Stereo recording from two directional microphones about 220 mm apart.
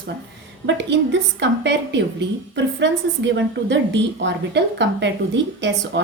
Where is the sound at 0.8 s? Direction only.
50° right (ahead or behind).